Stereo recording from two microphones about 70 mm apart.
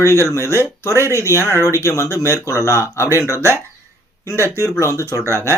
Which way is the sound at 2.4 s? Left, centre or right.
Left.